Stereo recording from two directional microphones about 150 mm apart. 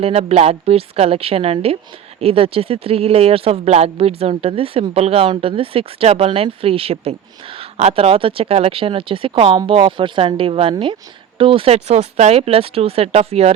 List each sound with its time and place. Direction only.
0.0 s speech: 40° right (ahead or behind)